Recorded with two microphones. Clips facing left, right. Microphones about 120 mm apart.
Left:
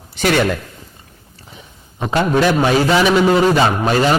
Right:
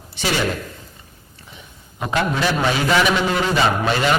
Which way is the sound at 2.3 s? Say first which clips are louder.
Left 6 dB; 50° left (ahead or behind).